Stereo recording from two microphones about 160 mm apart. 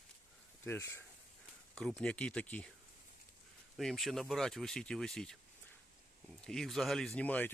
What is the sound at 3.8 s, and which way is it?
Speech, centre (ahead or behind).